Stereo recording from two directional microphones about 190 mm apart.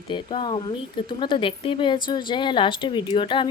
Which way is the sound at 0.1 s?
25° left (ahead or behind).